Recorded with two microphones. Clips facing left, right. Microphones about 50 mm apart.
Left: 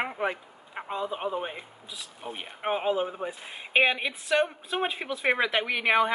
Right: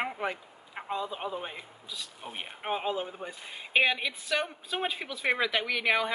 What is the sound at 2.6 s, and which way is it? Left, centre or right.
Speech, centre.